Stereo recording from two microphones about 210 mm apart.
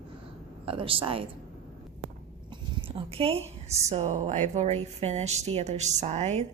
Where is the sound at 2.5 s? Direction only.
25° right (ahead or behind).